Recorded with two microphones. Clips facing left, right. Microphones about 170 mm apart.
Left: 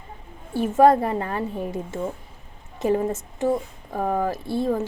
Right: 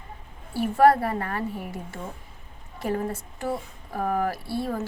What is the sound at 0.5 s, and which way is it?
Speech, 20° left (ahead or behind).